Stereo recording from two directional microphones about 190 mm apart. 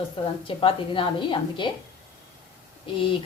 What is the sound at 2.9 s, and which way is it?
Speech, 30° left (ahead or behind).